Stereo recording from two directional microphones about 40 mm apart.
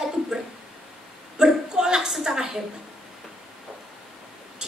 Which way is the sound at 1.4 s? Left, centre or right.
Centre.